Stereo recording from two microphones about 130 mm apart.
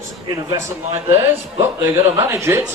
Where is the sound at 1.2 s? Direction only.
20° right (ahead or behind).